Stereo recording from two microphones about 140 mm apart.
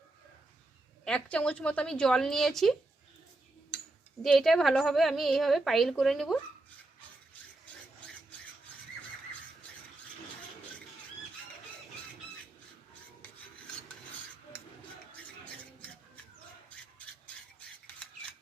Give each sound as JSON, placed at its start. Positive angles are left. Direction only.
{"t": 1.0, "sound": "a woman's voice", "side_deg": 10}
{"t": 4.2, "sound": "a woman's voice", "side_deg": 0}